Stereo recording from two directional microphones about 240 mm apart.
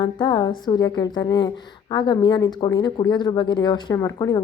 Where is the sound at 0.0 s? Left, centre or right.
Centre.